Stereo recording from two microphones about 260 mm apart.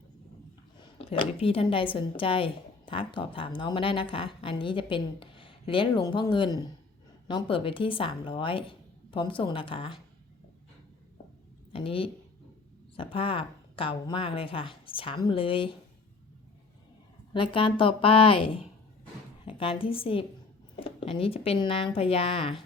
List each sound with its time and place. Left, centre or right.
0.8 s speech: left
11.7 s speech: left
17.3 s speech: centre